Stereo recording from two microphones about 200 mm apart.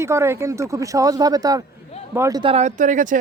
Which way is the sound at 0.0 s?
15° right (ahead or behind).